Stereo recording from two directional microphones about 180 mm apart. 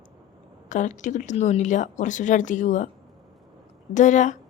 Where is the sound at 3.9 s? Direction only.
40° left (ahead or behind).